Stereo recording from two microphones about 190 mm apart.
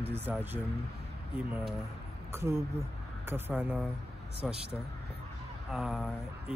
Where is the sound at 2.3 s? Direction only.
15° right (ahead or behind).